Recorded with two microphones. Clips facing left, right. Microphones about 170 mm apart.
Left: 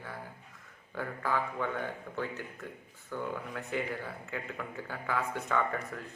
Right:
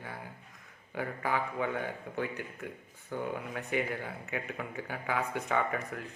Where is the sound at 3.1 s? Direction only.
50° right (ahead or behind).